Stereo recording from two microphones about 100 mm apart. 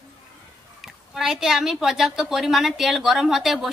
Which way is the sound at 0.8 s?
5° right (ahead or behind).